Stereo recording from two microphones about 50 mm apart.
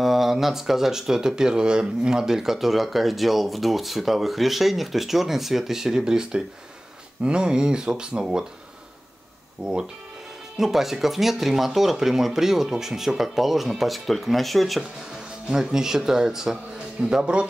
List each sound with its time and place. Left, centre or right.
0.0 s speech: centre
9.6 s speech: right
10.6 s speech: centre
15.4 s speech: centre